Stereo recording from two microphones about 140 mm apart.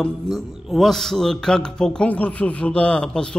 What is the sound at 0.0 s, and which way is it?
A man's voice, centre (ahead or behind).